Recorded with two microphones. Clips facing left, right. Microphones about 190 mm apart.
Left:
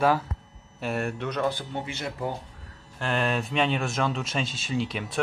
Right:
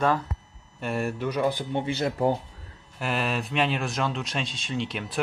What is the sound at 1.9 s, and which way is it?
Speech, 40° right (ahead or behind).